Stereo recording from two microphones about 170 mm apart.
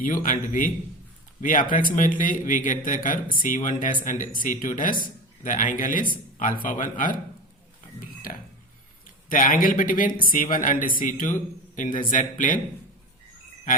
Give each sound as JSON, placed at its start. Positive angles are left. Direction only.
{"t": 0.0, "sound": "speech", "side_deg": 55}
{"t": 8.0, "sound": "a sound", "side_deg": 55}
{"t": 9.3, "sound": "speech", "side_deg": 55}